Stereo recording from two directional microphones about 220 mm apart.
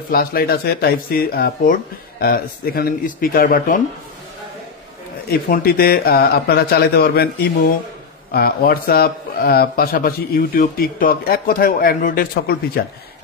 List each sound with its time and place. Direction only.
0.1 s speech: 45° left (ahead or behind)
5.5 s speech: 40° left (ahead or behind)